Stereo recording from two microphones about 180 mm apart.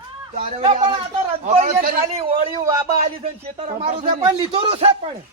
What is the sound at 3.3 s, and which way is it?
Speech, 35° right (ahead or behind).